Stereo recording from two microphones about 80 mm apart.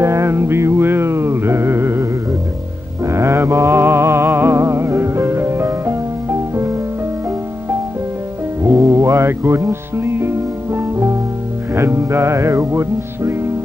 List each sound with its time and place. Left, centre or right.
0.0 s music: right
3.1 s music: right
8.6 s music: right